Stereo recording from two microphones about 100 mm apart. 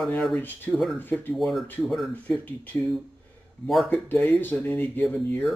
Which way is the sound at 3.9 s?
15° left (ahead or behind).